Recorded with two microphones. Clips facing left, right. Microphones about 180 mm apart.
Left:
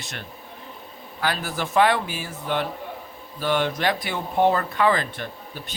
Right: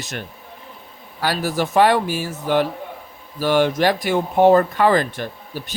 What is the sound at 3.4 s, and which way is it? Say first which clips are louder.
Speech: right 6 dB; 40° right (ahead or behind).